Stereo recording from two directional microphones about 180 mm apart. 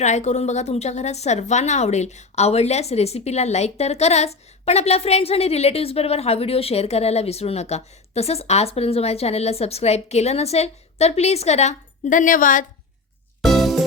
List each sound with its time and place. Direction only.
0.0 s a woman's voice: 40° left (ahead or behind)
13.4 s music: centre (ahead or behind)